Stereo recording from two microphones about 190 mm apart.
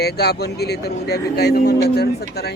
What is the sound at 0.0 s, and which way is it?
Speech, 60° left (ahead or behind).